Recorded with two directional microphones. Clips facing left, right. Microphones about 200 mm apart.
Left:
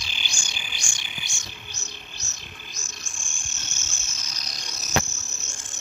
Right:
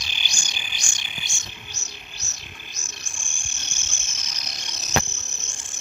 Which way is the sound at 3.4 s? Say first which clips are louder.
Left 1 dB; 15° right (ahead or behind).